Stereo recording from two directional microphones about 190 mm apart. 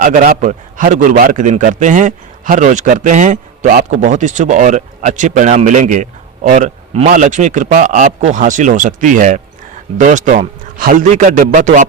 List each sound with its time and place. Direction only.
0.0 s a man's voice: 45° right (ahead or behind)